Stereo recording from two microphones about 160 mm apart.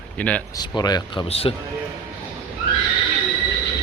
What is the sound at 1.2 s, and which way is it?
Speech, 40° left (ahead or behind).